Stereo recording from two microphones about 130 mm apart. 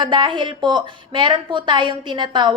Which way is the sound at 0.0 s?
35° right (ahead or behind).